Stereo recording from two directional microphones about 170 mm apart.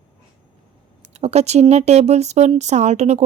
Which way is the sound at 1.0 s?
40° right (ahead or behind).